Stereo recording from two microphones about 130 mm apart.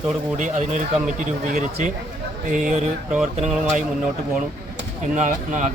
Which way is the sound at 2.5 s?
85° right.